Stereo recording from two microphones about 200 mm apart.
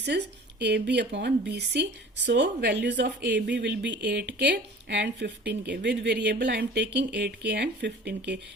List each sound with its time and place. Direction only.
0.1 s speech: 55° right (ahead or behind)